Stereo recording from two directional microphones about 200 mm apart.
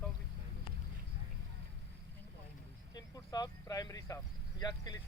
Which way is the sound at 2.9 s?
20° left (ahead or behind).